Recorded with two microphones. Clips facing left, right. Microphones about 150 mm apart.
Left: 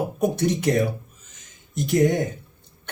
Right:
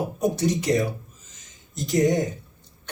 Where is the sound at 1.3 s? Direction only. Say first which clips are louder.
Even; 60° left (ahead or behind).